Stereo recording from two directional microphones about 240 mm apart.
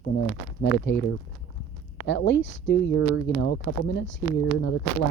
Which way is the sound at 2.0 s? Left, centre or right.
Left.